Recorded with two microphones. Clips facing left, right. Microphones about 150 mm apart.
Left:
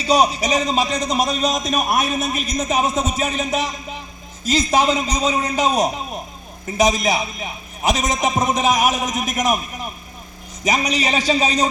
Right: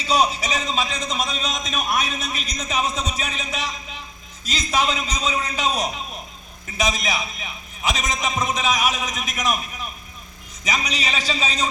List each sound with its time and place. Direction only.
0.0 s a man's voice: 40° left (ahead or behind)